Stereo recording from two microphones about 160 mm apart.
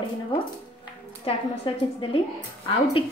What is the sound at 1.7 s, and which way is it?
Speech, 30° left (ahead or behind).